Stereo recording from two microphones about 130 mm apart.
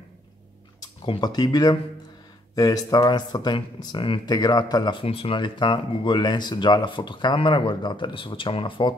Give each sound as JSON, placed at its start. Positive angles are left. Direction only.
{"t": 0.7, "sound": "speech", "side_deg": 30}
{"t": 5.0, "sound": "speech", "side_deg": 45}